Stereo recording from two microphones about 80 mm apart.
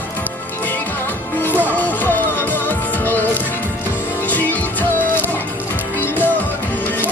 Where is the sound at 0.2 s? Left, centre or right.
Left.